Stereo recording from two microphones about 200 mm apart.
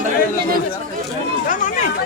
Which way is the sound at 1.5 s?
40° left (ahead or behind).